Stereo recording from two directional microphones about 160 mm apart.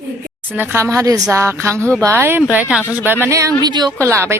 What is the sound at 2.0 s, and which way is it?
Speech, 15° right (ahead or behind).